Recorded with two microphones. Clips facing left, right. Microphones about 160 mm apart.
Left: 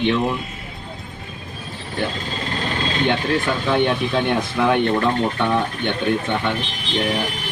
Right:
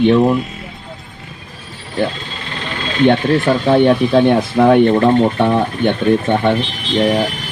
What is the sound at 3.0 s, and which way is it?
Speech, 45° right (ahead or behind).